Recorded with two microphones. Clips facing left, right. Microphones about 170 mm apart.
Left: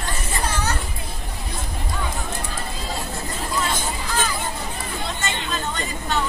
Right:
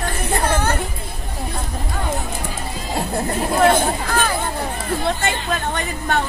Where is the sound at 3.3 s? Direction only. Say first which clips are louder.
Right 11 dB; 60° right (ahead or behind).